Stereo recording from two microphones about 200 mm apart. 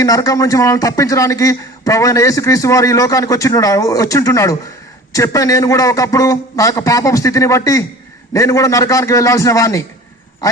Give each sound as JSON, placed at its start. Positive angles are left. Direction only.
{"t": 0.0, "sound": "a man's voice", "side_deg": 15}